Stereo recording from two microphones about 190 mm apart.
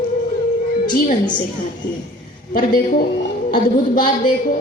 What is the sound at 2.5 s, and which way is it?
A woman's voice, 50° left (ahead or behind).